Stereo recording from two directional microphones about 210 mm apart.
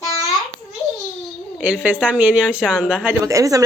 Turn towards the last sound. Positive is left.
turn(degrees=-15)  # may be behind; listen again after turning